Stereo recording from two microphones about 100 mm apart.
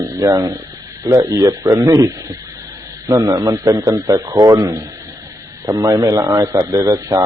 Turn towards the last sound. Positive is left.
turn(degrees=-35)  # may be behind; listen again after turning